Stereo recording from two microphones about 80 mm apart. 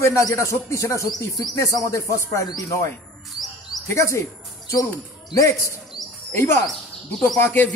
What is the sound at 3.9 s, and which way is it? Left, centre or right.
Speech, left.